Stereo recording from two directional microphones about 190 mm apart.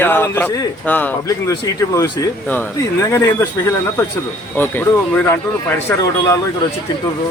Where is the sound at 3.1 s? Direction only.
15° left (ahead or behind).